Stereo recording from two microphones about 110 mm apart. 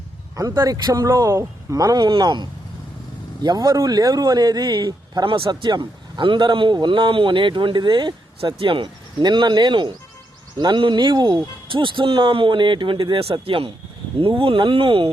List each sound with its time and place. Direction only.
0.3 s speech: 30° right (ahead or behind); by 15.1 s 55° right (ahead or behind)